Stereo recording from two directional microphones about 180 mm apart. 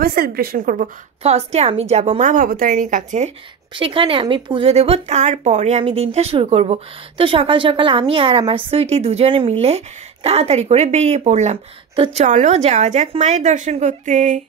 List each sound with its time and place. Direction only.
0.0 s a woman's voice: 55° right (ahead or behind)
1.2 s a woman's voice: 35° right (ahead or behind)
2.3 s speech: 50° right (ahead or behind)
3.7 s a woman's voice: 30° right (ahead or behind); by 14.4 s 45° right (ahead or behind)